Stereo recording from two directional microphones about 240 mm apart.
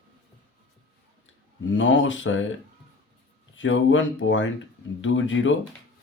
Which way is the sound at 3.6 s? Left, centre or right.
Left.